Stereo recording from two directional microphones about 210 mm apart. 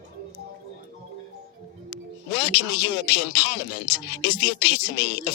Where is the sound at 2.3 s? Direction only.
50° left (ahead or behind).